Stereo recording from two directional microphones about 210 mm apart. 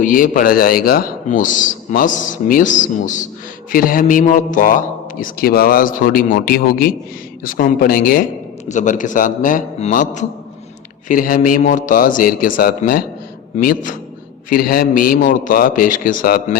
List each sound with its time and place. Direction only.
0.0 s a man's voice: 40° left (ahead or behind)